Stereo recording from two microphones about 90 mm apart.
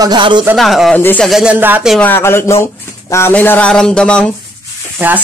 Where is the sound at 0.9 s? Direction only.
20° left (ahead or behind).